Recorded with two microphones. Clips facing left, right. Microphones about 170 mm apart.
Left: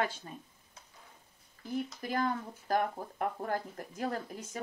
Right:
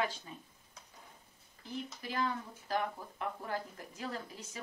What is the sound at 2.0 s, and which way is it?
Speech, 50° left (ahead or behind).